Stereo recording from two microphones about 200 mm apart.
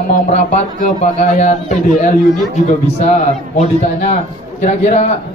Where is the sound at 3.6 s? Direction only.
35° left (ahead or behind).